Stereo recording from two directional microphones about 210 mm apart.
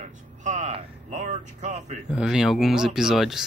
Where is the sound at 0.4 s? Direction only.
35° right (ahead or behind).